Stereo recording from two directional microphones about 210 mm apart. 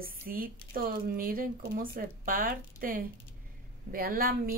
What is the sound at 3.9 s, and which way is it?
Speech, 45° right (ahead or behind).